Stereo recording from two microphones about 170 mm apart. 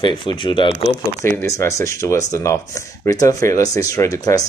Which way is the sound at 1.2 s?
15° left (ahead or behind).